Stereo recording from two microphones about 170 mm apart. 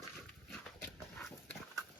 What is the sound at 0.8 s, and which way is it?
Horse, 10° left (ahead or behind).